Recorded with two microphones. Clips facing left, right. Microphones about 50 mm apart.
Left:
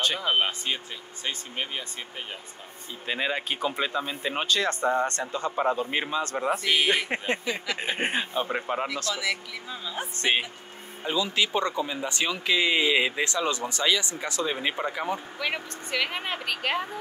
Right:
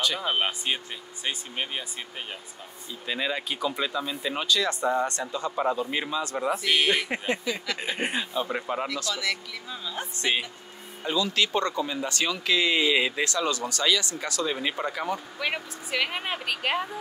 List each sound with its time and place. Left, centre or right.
0.2 s speech: centre
3.1 s speech: left
6.6 s a woman's voice: centre
7.1 s speech: left
9.1 s speech: centre
10.1 s speech: left
11.1 s speech: centre
15.3 s a woman's voice: centre